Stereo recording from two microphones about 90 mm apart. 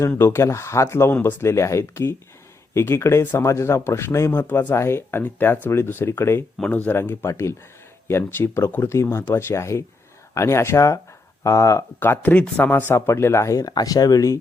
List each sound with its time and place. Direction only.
0.2 s speech: 30° left (ahead or behind)
11.9 s speech: 25° left (ahead or behind)
12.9 s speech: 30° left (ahead or behind)